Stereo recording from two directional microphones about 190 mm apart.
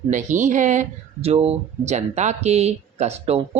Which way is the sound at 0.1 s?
40° right (ahead or behind).